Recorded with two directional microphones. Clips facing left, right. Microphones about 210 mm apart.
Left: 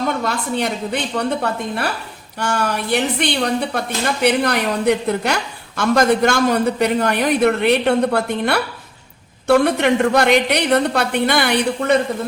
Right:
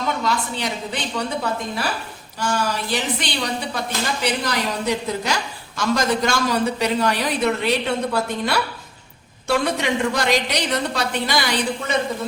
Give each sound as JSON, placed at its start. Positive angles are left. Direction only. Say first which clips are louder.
{"t": 0.2, "sound": "a woman's voice", "louder": "left 3 dB", "side_deg": 55}